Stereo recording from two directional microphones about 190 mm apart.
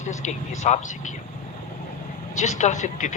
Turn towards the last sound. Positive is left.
turn(degrees=40)  # may be behind; listen again after turning